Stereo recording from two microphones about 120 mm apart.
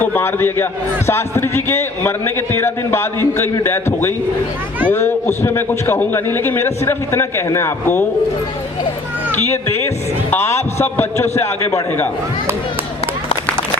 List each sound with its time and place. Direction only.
0.0 s a man's voice: 15° left (ahead or behind)
10.3 s a man's voice: 20° left (ahead or behind)